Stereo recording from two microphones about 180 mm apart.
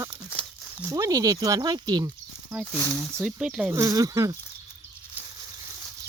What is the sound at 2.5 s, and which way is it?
Speech, 5° right (ahead or behind).